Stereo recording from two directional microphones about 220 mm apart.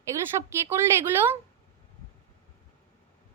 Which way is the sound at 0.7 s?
10° right (ahead or behind).